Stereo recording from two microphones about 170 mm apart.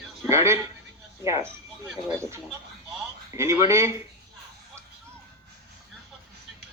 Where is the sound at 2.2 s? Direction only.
15° right (ahead or behind).